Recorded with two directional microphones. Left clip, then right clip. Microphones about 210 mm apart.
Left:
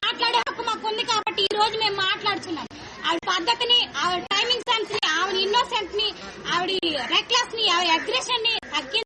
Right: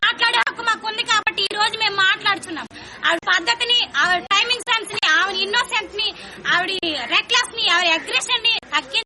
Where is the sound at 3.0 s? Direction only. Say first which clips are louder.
Right 5 dB; 10° right (ahead or behind).